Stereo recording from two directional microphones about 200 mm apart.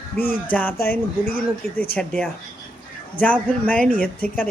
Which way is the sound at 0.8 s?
45° left (ahead or behind).